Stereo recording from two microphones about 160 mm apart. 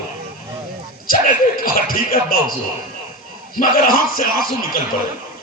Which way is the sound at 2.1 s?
65° left (ahead or behind).